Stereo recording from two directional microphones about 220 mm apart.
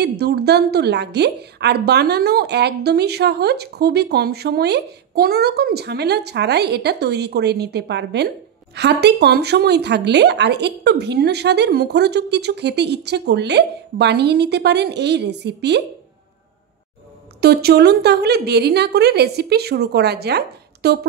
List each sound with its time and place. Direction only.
0.0 s a woman's voice: 50° right (ahead or behind)
17.4 s a woman's voice: 45° right (ahead or behind)